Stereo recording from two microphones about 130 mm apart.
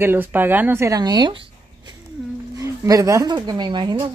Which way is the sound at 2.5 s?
25° right (ahead or behind).